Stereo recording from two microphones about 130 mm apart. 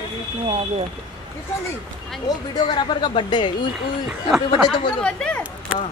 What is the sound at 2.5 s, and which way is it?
Speech, 35° left (ahead or behind).